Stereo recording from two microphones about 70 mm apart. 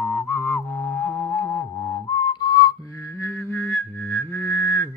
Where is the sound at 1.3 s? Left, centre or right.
Left.